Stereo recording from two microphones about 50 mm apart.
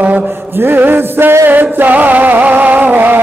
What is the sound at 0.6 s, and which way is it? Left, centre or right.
Music, right.